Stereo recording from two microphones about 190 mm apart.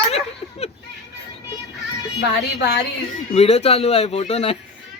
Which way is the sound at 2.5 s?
60° left (ahead or behind).